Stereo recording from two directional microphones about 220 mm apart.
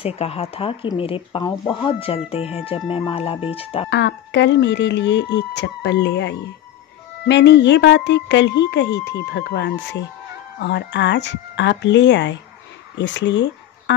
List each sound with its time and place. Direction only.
0.0 s speech: 25° left (ahead or behind)
3.9 s a woman's voice: 55° left (ahead or behind)